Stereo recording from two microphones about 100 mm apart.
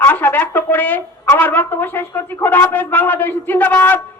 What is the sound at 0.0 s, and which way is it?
A woman's voice, 20° left (ahead or behind).